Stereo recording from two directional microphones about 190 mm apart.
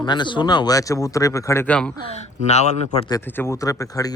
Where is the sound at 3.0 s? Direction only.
15° left (ahead or behind).